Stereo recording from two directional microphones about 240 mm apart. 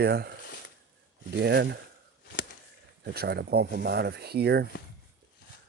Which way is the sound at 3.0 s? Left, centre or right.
Right.